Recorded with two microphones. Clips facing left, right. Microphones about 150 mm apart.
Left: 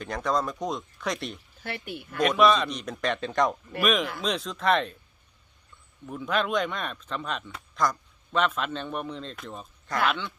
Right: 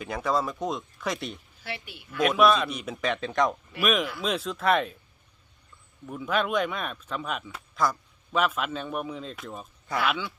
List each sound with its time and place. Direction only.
0.0 s speech: 5° right (ahead or behind)
1.6 s speech: 50° left (ahead or behind)
2.1 s speech: centre (ahead or behind)
6.1 s speech: 5° right (ahead or behind)